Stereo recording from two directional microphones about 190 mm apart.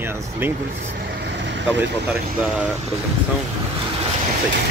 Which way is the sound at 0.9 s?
65° right (ahead or behind).